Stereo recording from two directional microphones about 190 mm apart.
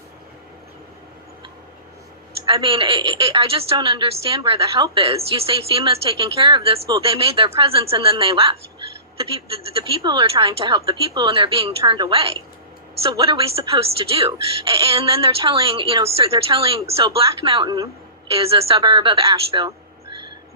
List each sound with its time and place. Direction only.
2.5 s a woman's voice: 30° right (ahead or behind)